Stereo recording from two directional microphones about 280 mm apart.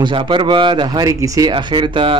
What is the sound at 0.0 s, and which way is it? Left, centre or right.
Speech, centre.